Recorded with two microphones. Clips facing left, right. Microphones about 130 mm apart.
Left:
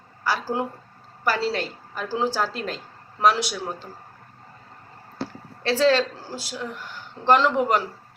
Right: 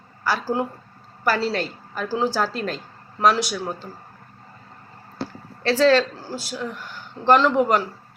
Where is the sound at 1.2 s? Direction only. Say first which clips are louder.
Right 2 dB; 20° left (ahead or behind).